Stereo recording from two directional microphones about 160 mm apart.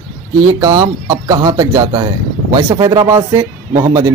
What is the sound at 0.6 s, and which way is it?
A man's voice, 20° right (ahead or behind).